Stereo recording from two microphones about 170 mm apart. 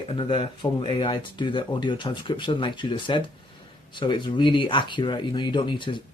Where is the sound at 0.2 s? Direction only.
30° left (ahead or behind).